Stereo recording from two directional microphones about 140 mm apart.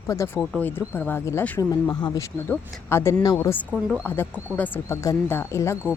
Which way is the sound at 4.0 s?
15° left (ahead or behind).